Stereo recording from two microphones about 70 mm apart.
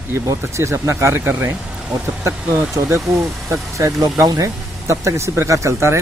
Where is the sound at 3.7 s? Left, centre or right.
Right.